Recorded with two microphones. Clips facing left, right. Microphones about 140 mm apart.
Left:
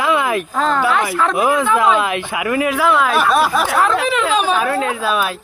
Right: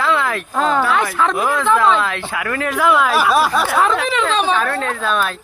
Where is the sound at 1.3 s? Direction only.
20° left (ahead or behind).